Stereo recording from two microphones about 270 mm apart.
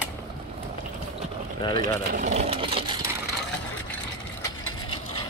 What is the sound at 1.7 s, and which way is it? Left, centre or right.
Speech, right.